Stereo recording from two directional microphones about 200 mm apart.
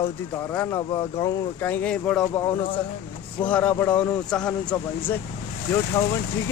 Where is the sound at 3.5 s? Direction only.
5° left (ahead or behind).